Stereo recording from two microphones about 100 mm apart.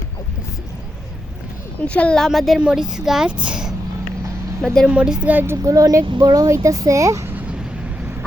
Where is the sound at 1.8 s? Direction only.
15° left (ahead or behind); by 3.8 s 5° right (ahead or behind).